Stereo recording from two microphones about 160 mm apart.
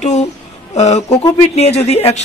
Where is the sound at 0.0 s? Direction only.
45° left (ahead or behind).